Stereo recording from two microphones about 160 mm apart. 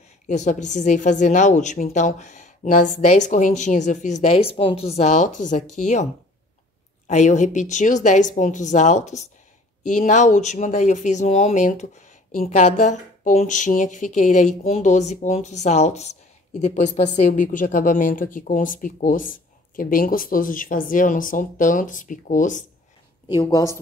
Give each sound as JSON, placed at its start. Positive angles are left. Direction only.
{"t": 0.3, "sound": "a woman's voice", "side_deg": 50}
{"t": 7.1, "sound": "a woman's voice", "side_deg": 50}